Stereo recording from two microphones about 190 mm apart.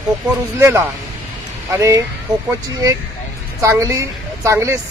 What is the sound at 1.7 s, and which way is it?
Speech, 15° right (ahead or behind).